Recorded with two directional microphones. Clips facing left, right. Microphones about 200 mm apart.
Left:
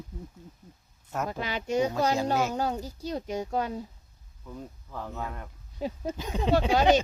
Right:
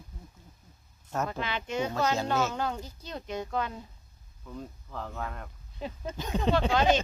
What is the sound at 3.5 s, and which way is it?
Speech, 40° left (ahead or behind).